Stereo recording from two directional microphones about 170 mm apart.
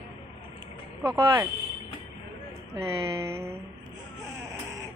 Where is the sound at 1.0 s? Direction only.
15° right (ahead or behind).